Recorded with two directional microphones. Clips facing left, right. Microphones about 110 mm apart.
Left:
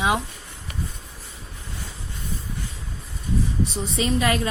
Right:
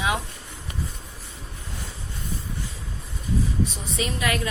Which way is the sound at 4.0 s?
30° left (ahead or behind).